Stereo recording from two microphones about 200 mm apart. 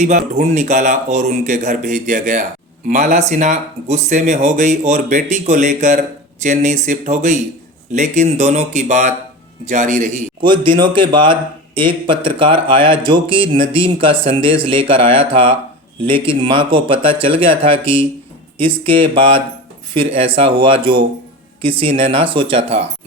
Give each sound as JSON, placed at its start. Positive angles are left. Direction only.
{"t": 0.0, "sound": "speech", "side_deg": -35}
{"t": 10.4, "sound": "a man's voice", "side_deg": -25}